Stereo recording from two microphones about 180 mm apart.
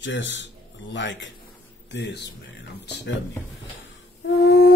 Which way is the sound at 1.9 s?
75° left (ahead or behind).